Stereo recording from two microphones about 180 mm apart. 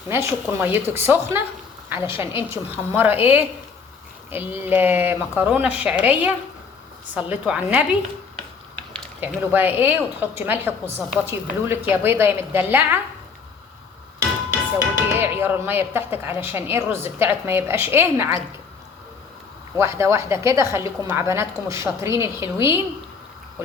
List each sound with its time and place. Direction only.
0.1 s a woman's voice: 10° right (ahead or behind)
9.2 s a woman's voice: 10° right (ahead or behind)
15.2 s a woman's voice: 10° right (ahead or behind)
19.7 s a woman's voice: 15° right (ahead or behind)